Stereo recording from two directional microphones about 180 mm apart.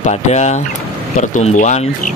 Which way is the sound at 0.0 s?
40° left (ahead or behind).